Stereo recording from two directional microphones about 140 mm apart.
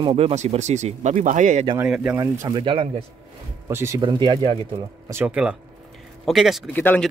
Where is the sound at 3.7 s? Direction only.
20° right (ahead or behind).